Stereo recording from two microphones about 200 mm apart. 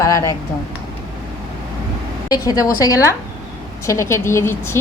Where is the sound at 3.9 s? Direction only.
15° left (ahead or behind).